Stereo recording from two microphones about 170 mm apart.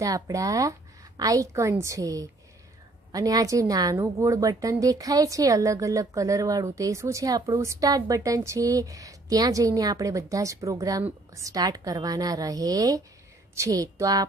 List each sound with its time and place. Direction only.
0.0 s speech: 20° right (ahead or behind)